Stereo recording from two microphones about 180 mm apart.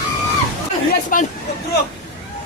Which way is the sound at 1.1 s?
50° left (ahead or behind).